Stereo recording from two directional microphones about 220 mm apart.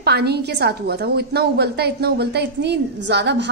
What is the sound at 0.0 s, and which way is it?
A woman's voice, 45° right (ahead or behind).